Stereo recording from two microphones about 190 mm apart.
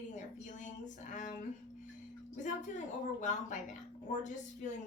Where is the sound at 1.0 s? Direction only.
40° left (ahead or behind).